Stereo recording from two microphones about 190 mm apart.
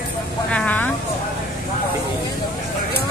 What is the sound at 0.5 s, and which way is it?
Speech, 10° left (ahead or behind).